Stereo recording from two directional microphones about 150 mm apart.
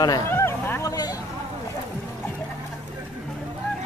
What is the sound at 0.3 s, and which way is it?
Hubbub, 15° left (ahead or behind).